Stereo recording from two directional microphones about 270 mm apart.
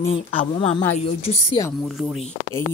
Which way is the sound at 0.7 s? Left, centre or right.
Centre.